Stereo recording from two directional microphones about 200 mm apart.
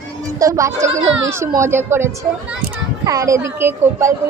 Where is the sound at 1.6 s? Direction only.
10° right (ahead or behind).